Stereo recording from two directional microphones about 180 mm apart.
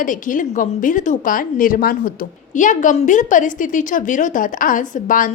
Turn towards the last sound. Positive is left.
turn(degrees=50)  # may be behind; listen again after turning